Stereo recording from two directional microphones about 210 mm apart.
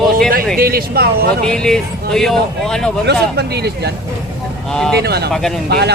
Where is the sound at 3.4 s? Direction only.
50° right (ahead or behind).